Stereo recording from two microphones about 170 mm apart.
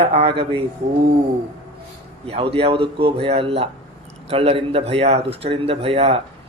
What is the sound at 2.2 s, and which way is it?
Speech, 35° right (ahead or behind).